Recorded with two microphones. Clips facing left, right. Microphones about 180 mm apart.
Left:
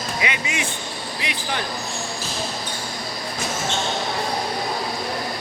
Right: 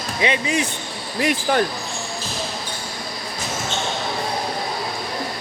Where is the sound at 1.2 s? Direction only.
45° right (ahead or behind).